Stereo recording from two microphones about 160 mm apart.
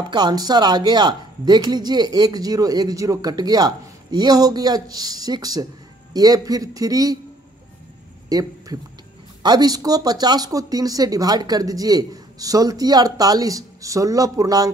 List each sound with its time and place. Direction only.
0.1 s speech: 25° right (ahead or behind)
8.3 s a sound: 25° right (ahead or behind)
9.4 s speech: 25° right (ahead or behind)